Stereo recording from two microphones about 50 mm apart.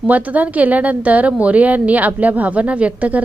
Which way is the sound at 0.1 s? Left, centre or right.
Right.